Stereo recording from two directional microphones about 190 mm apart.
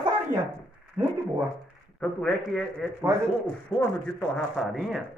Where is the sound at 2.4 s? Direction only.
Centre (ahead or behind).